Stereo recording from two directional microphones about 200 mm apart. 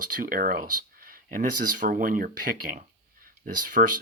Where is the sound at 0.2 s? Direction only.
45° right (ahead or behind).